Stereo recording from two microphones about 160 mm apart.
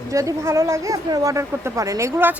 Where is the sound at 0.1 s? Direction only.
20° right (ahead or behind).